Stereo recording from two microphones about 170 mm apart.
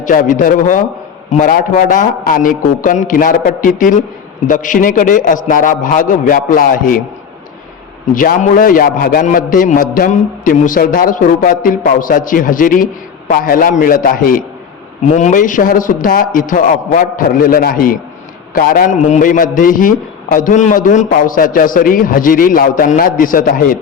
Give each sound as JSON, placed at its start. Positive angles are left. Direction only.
{"t": 0.0, "sound": "a man's voice", "side_deg": 50}
{"t": 8.1, "sound": "a man's voice", "side_deg": 55}
{"t": 15.1, "sound": "a man's voice", "side_deg": 45}